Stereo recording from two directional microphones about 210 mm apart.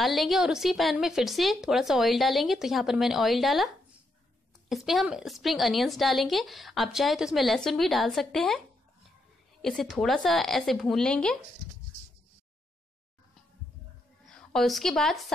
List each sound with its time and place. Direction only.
0.0 s a woman's voice: centre (ahead or behind)
14.2 s speech: centre (ahead or behind)